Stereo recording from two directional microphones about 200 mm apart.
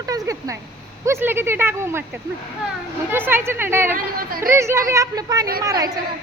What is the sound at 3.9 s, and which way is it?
Speech, 45° right (ahead or behind).